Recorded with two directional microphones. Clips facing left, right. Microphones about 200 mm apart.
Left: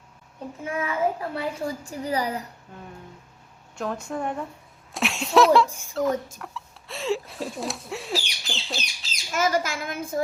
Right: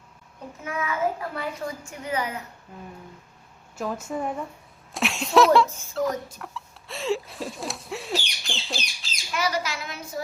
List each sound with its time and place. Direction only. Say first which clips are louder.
0.6 s a child's voice: left 1 dB; 30° left (ahead or behind)
3.8 s a woman's voice: even; 5° right (ahead or behind)
6.4 s a sound: even; centre (ahead or behind)
9.3 s a child's voice: left 3 dB; 45° left (ahead or behind)